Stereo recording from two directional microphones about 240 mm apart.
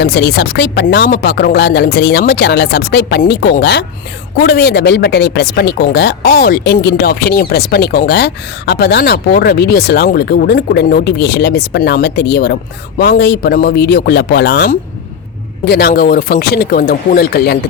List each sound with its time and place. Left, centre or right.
0.0 s speech: left